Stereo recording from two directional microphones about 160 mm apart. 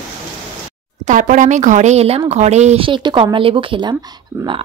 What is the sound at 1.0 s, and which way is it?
Speech, 50° right (ahead or behind).